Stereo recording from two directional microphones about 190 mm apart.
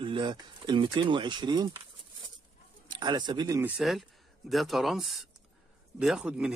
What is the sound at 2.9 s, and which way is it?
Speech, 20° right (ahead or behind).